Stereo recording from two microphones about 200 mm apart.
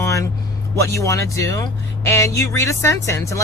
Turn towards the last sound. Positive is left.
turn(degrees=15)  # may be behind; listen again after turning